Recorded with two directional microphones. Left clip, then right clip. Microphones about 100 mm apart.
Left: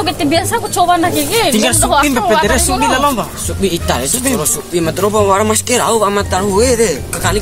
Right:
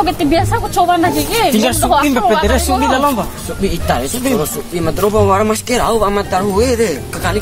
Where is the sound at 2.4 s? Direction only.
20° right (ahead or behind).